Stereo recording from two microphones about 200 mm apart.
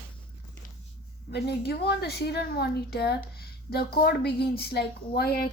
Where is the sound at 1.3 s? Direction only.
55° left (ahead or behind).